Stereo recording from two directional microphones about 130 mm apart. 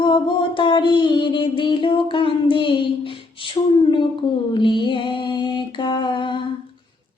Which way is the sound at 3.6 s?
40° left (ahead or behind).